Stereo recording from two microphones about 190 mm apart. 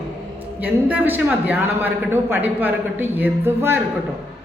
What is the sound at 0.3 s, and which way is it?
A man's voice, 10° right (ahead or behind).